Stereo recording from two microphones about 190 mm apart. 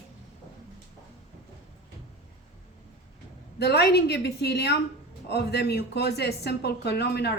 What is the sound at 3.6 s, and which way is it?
Speech, 60° left (ahead or behind).